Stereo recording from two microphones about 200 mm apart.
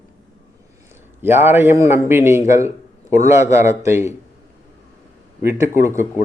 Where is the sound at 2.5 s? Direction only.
15° right (ahead or behind).